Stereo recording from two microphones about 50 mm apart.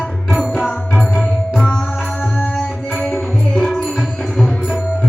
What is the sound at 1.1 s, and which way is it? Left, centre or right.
Music, centre.